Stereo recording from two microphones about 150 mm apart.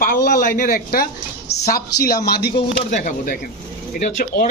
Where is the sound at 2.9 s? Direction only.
60° left (ahead or behind).